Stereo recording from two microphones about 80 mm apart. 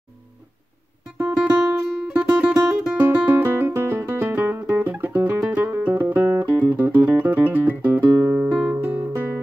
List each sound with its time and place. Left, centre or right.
1.1 s music: centre
3.4 s music: right
8.1 s music: right
8.5 s guitar: centre
8.9 s music: right